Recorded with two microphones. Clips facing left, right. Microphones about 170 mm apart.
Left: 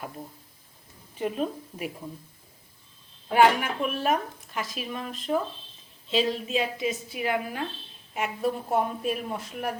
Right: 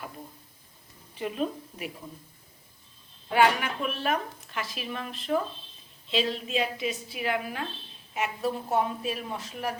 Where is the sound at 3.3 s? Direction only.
45° left (ahead or behind).